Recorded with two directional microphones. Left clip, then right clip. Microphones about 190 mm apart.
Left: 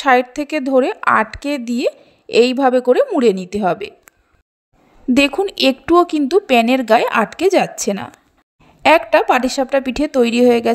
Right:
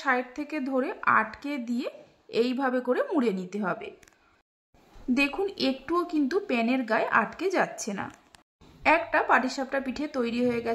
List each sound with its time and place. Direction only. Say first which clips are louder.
0.0 s speech: left 14 dB; 40° left (ahead or behind)
5.1 s speech: left 12 dB; 40° left (ahead or behind)